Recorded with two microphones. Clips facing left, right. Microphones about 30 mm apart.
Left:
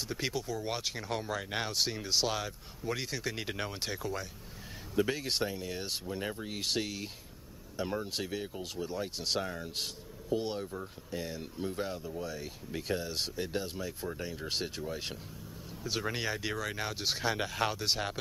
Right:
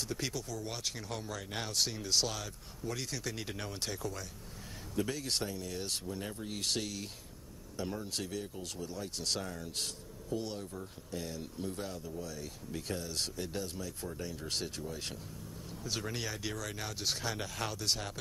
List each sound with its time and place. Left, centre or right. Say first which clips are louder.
0.1 s speech: left 7 dB; left